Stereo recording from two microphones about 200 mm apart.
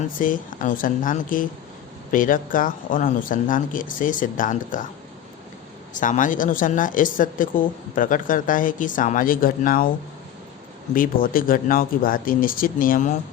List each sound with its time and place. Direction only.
0.2 s speech: 40° left (ahead or behind)
5.9 s speech: 40° left (ahead or behind)
10.9 s speech: 45° left (ahead or behind)